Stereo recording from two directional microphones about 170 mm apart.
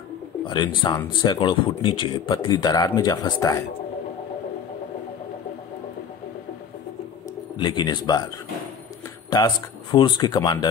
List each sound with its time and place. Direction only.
0.5 s speech: 25° left (ahead or behind)
7.5 s speech: 25° left (ahead or behind)
9.3 s speech: 25° left (ahead or behind)